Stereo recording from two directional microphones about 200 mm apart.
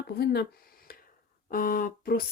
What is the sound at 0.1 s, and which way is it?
Speech, 50° left (ahead or behind).